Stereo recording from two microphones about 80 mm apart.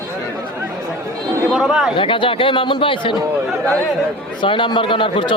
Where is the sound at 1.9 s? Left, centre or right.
Left.